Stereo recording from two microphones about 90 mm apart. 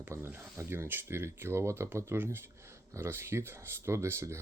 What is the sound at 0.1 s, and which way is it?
Speech, 25° right (ahead or behind).